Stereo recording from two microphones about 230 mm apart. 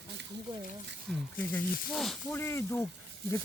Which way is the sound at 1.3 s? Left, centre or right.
Centre.